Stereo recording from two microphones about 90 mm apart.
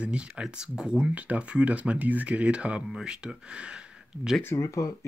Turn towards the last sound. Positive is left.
turn(degrees=40)  # may be behind; listen again after turning